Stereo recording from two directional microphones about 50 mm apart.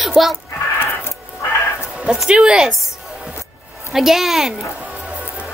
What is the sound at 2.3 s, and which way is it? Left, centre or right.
Speech, centre.